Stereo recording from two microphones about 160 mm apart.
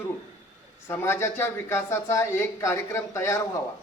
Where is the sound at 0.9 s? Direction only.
15° left (ahead or behind).